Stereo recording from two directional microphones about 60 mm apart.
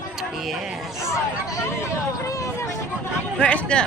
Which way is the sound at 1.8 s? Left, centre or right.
Left.